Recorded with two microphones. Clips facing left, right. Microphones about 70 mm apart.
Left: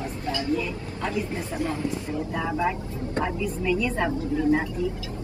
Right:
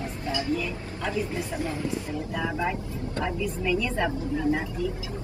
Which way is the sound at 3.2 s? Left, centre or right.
Centre.